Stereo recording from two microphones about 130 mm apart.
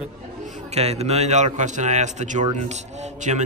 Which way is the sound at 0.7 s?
55° right (ahead or behind).